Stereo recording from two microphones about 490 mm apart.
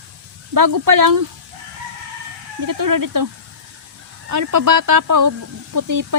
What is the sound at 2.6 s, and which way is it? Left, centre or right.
Speech, right.